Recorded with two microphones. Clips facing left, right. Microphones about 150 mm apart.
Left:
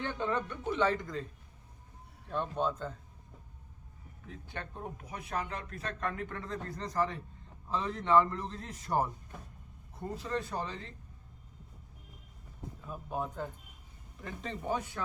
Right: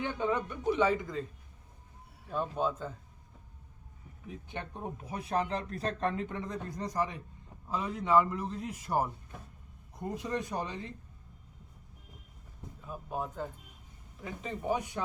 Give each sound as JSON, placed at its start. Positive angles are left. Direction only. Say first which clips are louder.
{"t": 0.0, "sound": "a man's voice", "louder": "right 2 dB", "side_deg": -10}
{"t": 4.3, "sound": "a man's voice", "louder": "right 2 dB", "side_deg": -15}
{"t": 10.2, "sound": "a man's voice", "louder": "right 1 dB", "side_deg": -15}
{"t": 12.9, "sound": "a man's voice", "louder": "even", "side_deg": 0}